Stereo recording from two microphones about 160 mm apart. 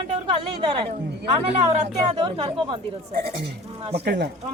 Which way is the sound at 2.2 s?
30° right (ahead or behind).